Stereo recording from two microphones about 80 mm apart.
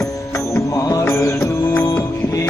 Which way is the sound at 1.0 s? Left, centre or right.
Left.